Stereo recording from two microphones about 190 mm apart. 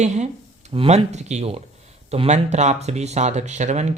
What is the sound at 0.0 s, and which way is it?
Speech, 35° right (ahead or behind).